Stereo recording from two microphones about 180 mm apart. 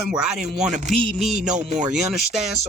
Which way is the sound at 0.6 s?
45° right (ahead or behind).